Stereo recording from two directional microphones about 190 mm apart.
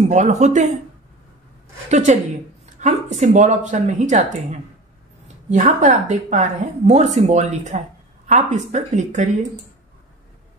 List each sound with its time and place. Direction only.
0.1 s a woman's voice: 40° right (ahead or behind)
1.9 s a woman's voice: 40° right (ahead or behind)